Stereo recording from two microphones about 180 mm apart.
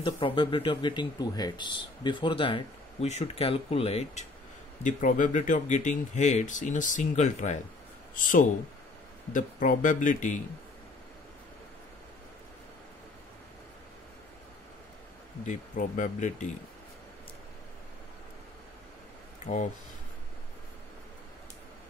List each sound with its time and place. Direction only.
0.0 s speech: 25° left (ahead or behind); by 10.4 s 45° left (ahead or behind)
15.4 s speech: 45° left (ahead or behind)
19.4 s speech: 40° left (ahead or behind)